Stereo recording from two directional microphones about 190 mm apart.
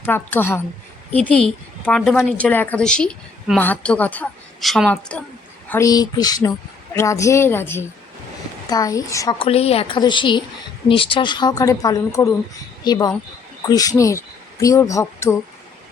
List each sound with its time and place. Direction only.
0.0 s a woman's voice: 10° left (ahead or behind)
9.4 s speech: 30° left (ahead or behind); by 15.4 s 15° left (ahead or behind)